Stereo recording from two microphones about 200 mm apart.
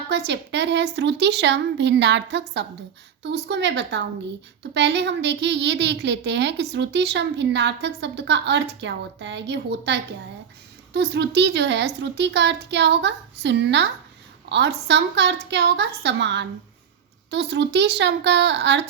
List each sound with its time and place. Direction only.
0.1 s a woman's voice: 60° right (ahead or behind)